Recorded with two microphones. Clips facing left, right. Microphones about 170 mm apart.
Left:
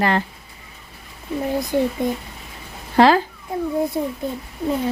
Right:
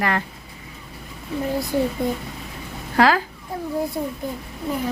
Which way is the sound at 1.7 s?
20° left (ahead or behind).